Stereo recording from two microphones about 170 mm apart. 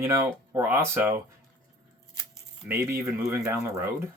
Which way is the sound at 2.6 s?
15° right (ahead or behind).